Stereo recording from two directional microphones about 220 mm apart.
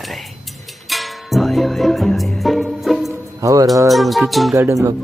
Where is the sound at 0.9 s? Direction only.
Centre (ahead or behind).